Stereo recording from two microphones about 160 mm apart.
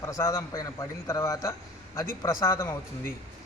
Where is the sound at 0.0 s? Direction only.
20° left (ahead or behind).